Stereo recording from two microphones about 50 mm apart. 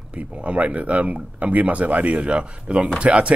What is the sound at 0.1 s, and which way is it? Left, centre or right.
A man's voice, right.